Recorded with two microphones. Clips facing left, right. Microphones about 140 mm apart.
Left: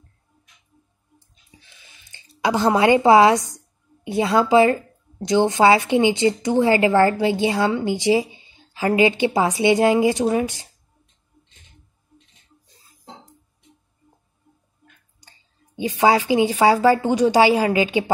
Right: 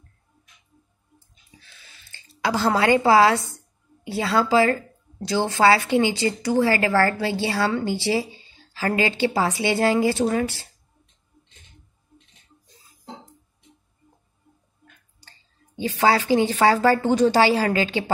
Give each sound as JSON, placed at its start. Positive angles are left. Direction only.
{"t": 1.6, "sound": "a sound", "side_deg": 15}
{"t": 4.0, "sound": "speech", "side_deg": 20}
{"t": 15.1, "sound": "speech", "side_deg": 15}